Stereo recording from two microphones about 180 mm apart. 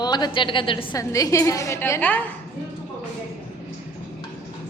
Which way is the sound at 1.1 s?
15° left (ahead or behind).